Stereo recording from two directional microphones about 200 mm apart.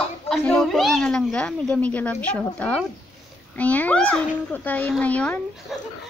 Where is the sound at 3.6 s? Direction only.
5° left (ahead or behind).